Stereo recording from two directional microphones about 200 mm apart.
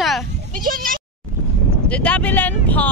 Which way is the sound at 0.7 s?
45° right (ahead or behind).